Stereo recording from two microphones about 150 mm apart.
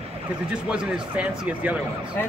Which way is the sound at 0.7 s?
5° right (ahead or behind).